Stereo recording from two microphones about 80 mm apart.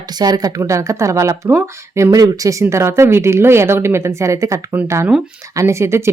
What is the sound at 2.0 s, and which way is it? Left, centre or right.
A woman's voice, right.